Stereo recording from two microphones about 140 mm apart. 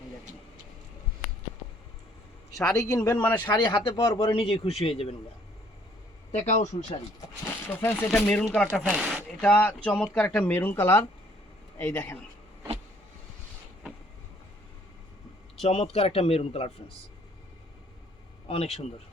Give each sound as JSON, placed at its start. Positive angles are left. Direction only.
{"t": 2.5, "sound": "a man's voice", "side_deg": 5}
{"t": 2.8, "sound": "speech", "side_deg": 25}
{"t": 3.2, "sound": "speech", "side_deg": 10}
{"t": 3.5, "sound": "speech", "side_deg": 35}
{"t": 6.3, "sound": "speech", "side_deg": 55}
{"t": 7.7, "sound": "speech", "side_deg": 15}
{"t": 8.8, "sound": "speech", "side_deg": -5}
{"t": 9.4, "sound": "speech", "side_deg": 10}
{"t": 15.6, "sound": "speech", "side_deg": 45}
{"t": 18.4, "sound": "speech", "side_deg": 45}